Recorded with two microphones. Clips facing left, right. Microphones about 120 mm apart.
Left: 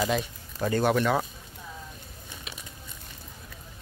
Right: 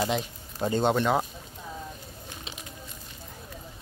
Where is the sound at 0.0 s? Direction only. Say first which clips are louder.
Left 1 dB; 20° right (ahead or behind).